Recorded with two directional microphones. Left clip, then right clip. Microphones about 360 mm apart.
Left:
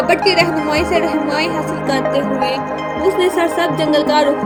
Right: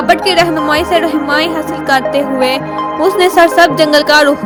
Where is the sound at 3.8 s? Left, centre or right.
Right.